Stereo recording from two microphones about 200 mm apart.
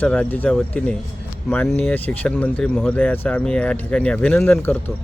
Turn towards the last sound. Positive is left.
turn(degrees=10)  # may be behind; listen again after turning